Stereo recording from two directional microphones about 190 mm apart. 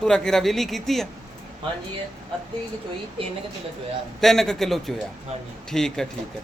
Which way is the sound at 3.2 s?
25° right (ahead or behind).